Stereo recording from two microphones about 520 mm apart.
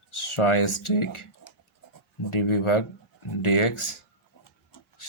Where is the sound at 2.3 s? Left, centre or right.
Left.